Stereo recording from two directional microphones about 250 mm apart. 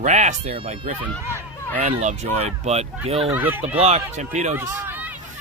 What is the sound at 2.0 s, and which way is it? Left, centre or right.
Speech, right.